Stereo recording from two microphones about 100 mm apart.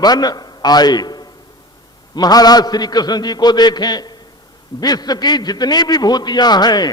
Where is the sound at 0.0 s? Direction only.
40° left (ahead or behind).